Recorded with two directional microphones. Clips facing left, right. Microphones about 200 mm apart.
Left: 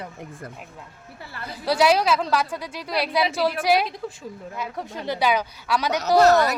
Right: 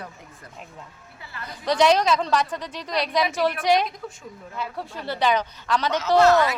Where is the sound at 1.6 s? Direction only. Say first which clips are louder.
Even; 5° left (ahead or behind).